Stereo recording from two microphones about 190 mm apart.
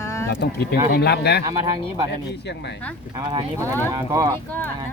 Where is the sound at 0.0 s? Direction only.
15° left (ahead or behind).